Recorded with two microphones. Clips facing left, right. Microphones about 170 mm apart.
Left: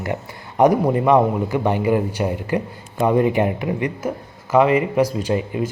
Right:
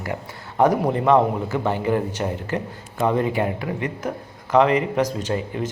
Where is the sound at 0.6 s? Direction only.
10° left (ahead or behind).